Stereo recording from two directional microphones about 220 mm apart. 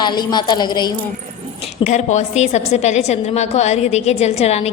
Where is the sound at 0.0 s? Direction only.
20° left (ahead or behind).